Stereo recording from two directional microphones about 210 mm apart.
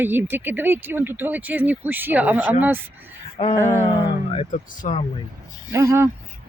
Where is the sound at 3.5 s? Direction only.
10° left (ahead or behind).